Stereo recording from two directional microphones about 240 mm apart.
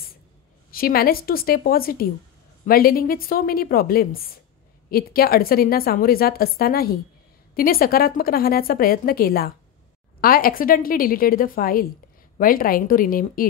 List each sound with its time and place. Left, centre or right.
0.7 s a woman's voice: left